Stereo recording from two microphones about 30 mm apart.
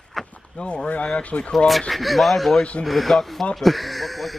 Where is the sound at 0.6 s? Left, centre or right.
Left.